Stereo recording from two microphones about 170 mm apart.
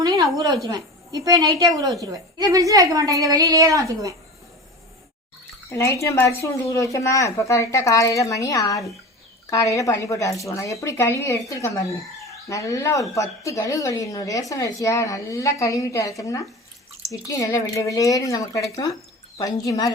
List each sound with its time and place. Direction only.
0.0 s speech: 20° right (ahead or behind)
5.6 s speech: 15° left (ahead or behind)